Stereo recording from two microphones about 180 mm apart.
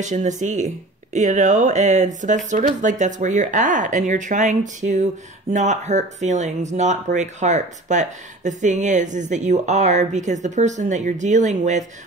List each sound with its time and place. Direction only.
0.0 s speech: 40° right (ahead or behind)